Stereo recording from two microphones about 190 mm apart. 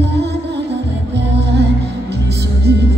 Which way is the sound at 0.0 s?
60° right (ahead or behind).